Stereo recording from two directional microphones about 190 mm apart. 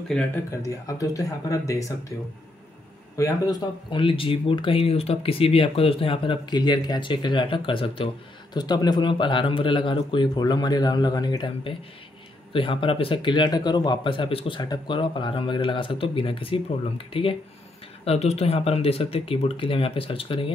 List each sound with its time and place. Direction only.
0.1 s speech: 5° left (ahead or behind)
0.5 s speech: 15° left (ahead or behind)
3.2 s speech: 15° left (ahead or behind)